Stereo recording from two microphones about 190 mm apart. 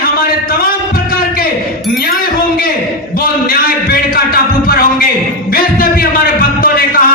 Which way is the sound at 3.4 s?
50° left (ahead or behind).